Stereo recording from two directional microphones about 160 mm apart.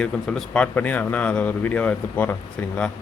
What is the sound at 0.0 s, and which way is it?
Speech, 5° left (ahead or behind).